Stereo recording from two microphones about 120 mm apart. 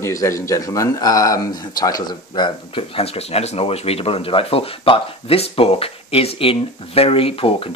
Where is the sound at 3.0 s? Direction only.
60° left (ahead or behind).